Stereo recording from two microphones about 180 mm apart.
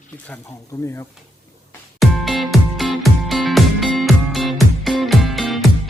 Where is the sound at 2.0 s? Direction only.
Centre (ahead or behind).